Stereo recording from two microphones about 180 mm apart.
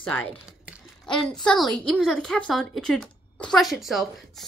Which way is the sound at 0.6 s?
Centre (ahead or behind).